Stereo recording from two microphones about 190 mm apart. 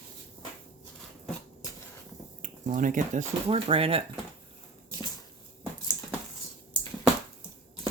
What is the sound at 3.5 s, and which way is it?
Speech, 30° right (ahead or behind).